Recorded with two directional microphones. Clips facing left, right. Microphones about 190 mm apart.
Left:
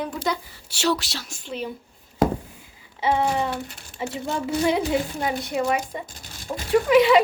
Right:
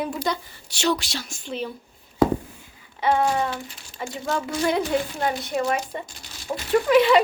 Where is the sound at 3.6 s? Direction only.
60° left (ahead or behind).